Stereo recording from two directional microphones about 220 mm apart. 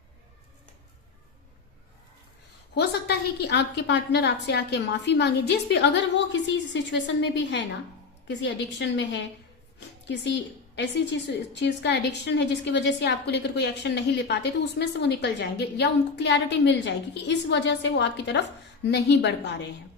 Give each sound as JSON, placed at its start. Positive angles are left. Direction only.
{"t": 2.7, "sound": "a woman's voice", "side_deg": 50}